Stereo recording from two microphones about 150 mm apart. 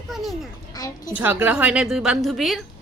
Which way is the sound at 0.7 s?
25° left (ahead or behind).